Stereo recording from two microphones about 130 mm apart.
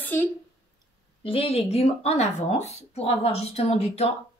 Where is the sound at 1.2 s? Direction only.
45° left (ahead or behind).